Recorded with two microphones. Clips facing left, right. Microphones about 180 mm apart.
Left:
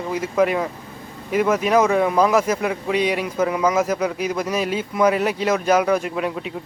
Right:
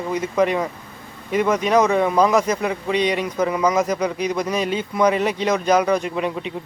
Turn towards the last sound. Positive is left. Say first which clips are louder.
# right 1 dB
turn(degrees=0)  # may be behind; listen again after turning